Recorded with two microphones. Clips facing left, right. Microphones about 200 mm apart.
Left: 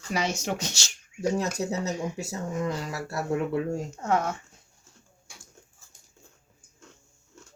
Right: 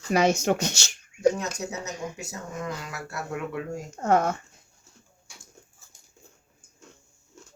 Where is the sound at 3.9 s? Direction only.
50° right (ahead or behind).